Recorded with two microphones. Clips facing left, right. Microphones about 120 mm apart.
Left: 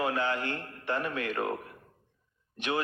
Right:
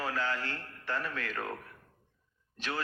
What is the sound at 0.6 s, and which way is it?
Speech, 55° left (ahead or behind).